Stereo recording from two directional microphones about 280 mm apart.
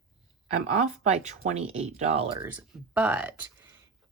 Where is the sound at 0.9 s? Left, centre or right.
Right.